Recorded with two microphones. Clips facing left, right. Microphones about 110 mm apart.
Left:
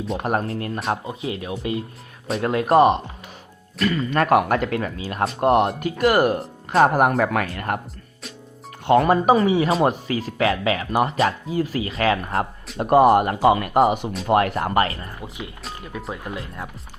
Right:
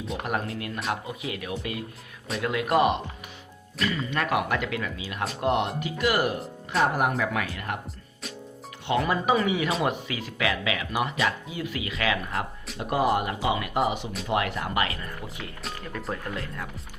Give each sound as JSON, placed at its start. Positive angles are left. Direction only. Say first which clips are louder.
{"t": 0.1, "sound": "speech", "louder": "left 6 dB", "side_deg": 40}
{"t": 2.3, "sound": "speech", "louder": "left 7 dB", "side_deg": 40}
{"t": 3.9, "sound": "speech", "louder": "left 10 dB", "side_deg": 45}
{"t": 8.9, "sound": "speech", "louder": "left 8 dB", "side_deg": 45}
{"t": 16.1, "sound": "speech", "louder": "left 2 dB", "side_deg": 20}